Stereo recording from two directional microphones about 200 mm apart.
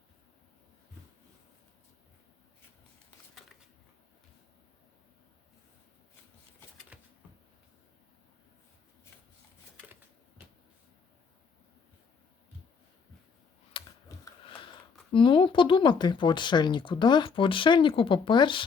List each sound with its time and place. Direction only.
13.7 s computer keyboard: 25° left (ahead or behind)
14.1 s a sound: 15° left (ahead or behind)
15.1 s speech: 25° left (ahead or behind)